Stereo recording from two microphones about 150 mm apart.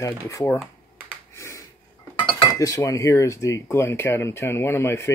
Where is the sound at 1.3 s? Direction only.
20° left (ahead or behind).